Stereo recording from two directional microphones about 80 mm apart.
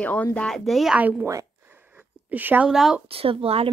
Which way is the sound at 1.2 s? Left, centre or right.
Right.